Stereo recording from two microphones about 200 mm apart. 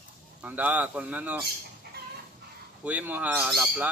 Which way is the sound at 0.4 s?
10° right (ahead or behind).